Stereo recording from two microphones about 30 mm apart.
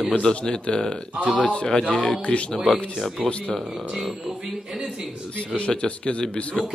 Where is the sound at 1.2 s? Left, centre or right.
Left.